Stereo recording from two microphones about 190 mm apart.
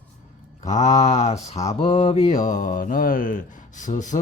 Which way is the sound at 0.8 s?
35° left (ahead or behind).